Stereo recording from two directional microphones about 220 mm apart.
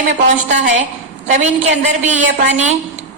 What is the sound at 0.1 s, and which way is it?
Speech, 30° right (ahead or behind).